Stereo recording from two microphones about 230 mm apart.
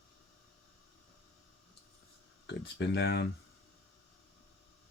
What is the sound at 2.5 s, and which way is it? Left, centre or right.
Speech, left.